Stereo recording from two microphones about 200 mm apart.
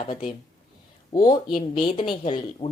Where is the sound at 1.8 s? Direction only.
25° left (ahead or behind).